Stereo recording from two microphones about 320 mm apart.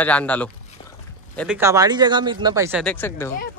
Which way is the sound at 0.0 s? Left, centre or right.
Centre.